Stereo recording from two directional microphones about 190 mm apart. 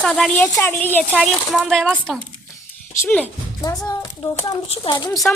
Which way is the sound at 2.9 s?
10° left (ahead or behind).